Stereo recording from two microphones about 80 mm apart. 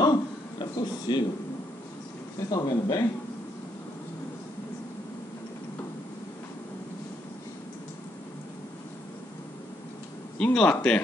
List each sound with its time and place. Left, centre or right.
0.0 s a sound: left
2.5 s a man's voice: left
10.4 s speech: centre